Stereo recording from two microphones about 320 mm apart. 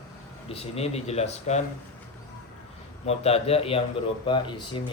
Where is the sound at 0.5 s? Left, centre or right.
Centre.